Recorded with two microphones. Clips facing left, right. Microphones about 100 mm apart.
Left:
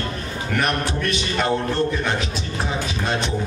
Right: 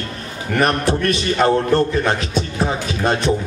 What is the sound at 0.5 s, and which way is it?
Speech, 35° right (ahead or behind).